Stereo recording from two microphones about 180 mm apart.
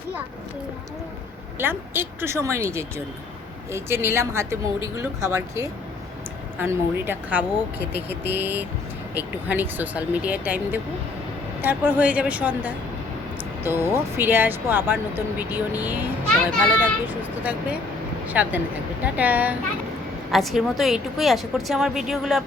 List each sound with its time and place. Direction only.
1.5 s a woman's voice: 10° right (ahead or behind)